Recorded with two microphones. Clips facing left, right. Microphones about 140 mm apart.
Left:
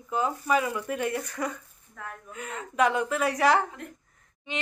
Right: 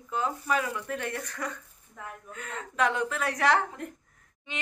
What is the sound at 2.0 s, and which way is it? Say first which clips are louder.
Speech: left 1 dB; 20° right (ahead or behind).